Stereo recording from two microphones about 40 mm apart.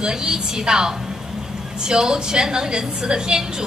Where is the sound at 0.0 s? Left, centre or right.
Centre.